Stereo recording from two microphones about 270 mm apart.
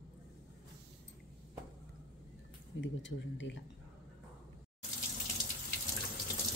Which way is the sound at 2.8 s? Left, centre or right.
Left.